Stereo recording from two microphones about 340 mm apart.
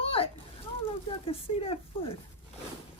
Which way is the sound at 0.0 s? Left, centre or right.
Centre.